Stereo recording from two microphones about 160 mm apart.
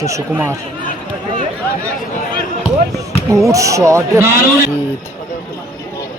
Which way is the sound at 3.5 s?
20° right (ahead or behind).